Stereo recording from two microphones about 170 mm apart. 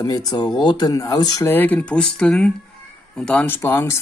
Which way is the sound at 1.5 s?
10° left (ahead or behind).